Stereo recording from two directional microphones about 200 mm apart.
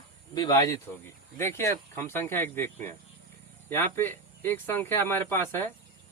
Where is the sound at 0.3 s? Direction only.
20° left (ahead or behind).